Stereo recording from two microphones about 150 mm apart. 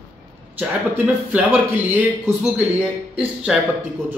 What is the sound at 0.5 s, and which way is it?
Speech, 10° right (ahead or behind).